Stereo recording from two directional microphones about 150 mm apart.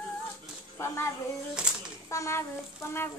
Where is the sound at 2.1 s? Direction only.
20° left (ahead or behind).